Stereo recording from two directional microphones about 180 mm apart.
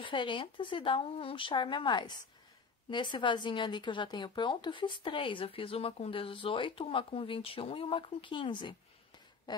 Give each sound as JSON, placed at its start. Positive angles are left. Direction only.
{"t": 0.0, "sound": "a woman's voice", "side_deg": 25}